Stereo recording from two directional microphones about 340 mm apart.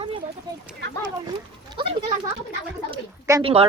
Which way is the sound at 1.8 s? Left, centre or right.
Centre.